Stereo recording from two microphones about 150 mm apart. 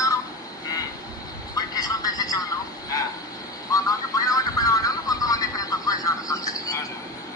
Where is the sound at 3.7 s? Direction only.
25° left (ahead or behind).